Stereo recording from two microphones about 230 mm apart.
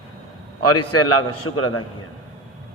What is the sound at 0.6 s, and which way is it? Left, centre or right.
A man's voice, left.